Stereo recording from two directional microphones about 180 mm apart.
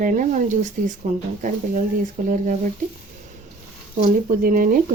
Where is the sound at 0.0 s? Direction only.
45° right (ahead or behind).